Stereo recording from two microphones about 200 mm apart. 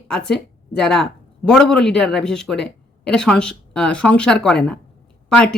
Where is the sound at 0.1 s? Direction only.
5° left (ahead or behind).